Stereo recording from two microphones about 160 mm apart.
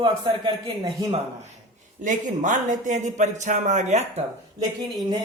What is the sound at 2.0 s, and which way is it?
A man's voice, 50° right (ahead or behind).